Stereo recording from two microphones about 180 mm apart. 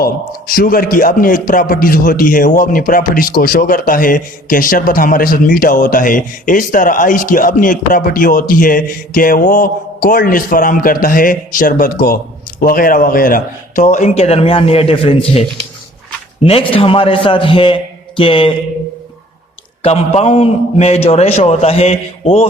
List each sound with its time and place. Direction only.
0.5 s a man's voice: 55° left (ahead or behind); by 18.5 s 30° left (ahead or behind)
19.8 s a man's voice: 35° left (ahead or behind)